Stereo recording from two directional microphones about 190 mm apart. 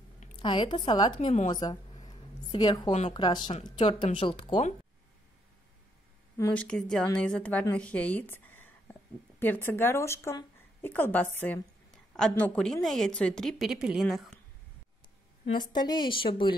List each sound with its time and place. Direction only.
0.4 s a woman's voice: 25° left (ahead or behind)
1.5 s a sound: 20° left (ahead or behind)
2.9 s speech: 35° left (ahead or behind)
3.2 s a woman's voice: 25° left (ahead or behind)
6.3 s a woman's voice: 10° left (ahead or behind)
15.4 s a woman's voice: 20° left (ahead or behind)